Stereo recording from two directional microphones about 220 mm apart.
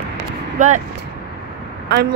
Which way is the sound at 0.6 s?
35° right (ahead or behind).